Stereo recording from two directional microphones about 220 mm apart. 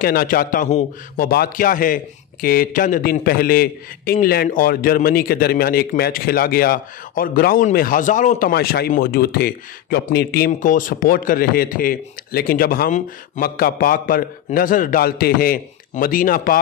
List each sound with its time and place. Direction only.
0.0 s a man's voice: 40° left (ahead or behind)